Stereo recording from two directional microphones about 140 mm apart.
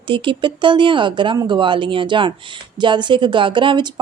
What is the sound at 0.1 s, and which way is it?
Speech, 35° right (ahead or behind).